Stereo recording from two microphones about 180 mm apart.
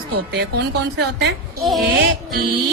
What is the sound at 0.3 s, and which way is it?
Speech, 65° right (ahead or behind).